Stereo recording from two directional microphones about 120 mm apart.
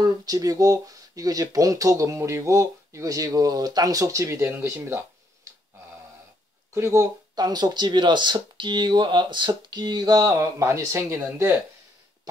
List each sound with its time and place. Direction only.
0.0 s speech: 30° right (ahead or behind)
6.7 s speech: 25° right (ahead or behind)